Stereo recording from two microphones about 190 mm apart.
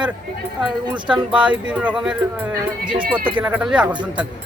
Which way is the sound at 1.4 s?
5° right (ahead or behind).